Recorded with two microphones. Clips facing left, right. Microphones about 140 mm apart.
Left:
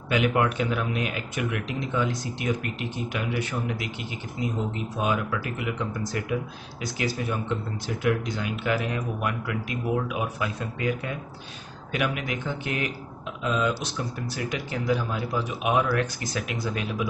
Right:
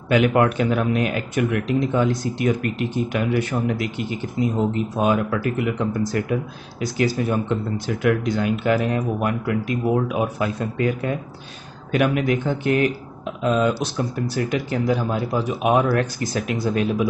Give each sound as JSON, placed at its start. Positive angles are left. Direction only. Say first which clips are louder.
{"t": 0.1, "sound": "speech", "louder": "right 6 dB", "side_deg": -50}
{"t": 4.9, "sound": "speech", "louder": "right 5 dB", "side_deg": -45}
{"t": 8.0, "sound": "speech", "louder": "right 6 dB", "side_deg": -55}